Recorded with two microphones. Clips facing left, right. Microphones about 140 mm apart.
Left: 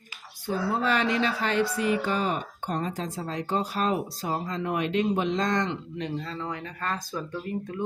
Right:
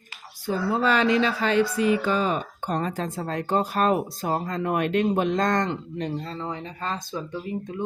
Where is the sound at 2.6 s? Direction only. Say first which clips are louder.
Right 3 dB; 85° right; by 7.0 s 25° right (ahead or behind).